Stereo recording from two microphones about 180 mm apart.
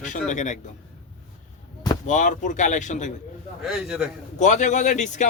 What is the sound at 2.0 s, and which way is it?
Speech, 45° left (ahead or behind).